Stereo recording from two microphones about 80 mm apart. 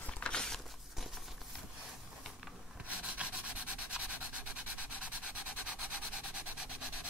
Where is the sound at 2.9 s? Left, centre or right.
Centre.